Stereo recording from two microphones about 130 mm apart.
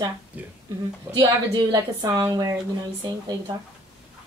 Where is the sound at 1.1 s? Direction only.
30° right (ahead or behind).